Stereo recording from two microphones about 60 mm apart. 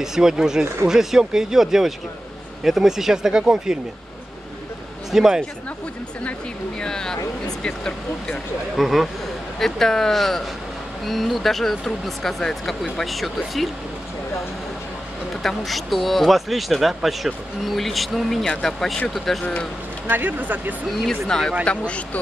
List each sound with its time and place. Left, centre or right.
0.0 s speech: centre
5.1 s speech: centre
6.8 s speech: centre
7.4 s a sound: centre
8.7 s speech: centre
15.4 s speech: centre
19.4 s speech: centre
20.1 s speech: right
21.3 s speech: centre